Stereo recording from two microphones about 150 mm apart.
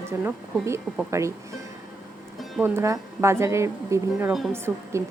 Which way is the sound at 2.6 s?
20° right (ahead or behind).